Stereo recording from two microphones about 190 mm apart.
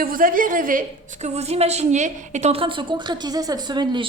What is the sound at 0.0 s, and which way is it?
A woman's voice, 50° right (ahead or behind).